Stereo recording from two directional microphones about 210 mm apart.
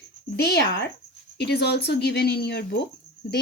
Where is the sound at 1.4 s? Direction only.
50° left (ahead or behind).